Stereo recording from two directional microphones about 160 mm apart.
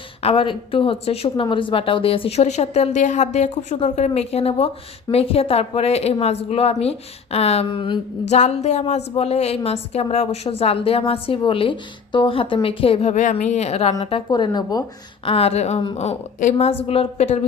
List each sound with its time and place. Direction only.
0.2 s speech: 35° left (ahead or behind)
8.3 s a woman's voice: 45° left (ahead or behind); by 14.8 s 25° left (ahead or behind)
15.2 s a woman's voice: 35° left (ahead or behind)